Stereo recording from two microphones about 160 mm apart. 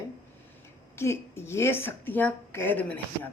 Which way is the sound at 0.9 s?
15° left (ahead or behind).